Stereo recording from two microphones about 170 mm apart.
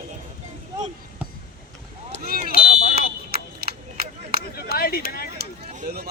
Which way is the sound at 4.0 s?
60° right (ahead or behind).